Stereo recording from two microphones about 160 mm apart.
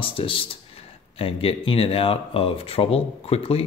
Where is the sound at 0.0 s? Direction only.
35° left (ahead or behind).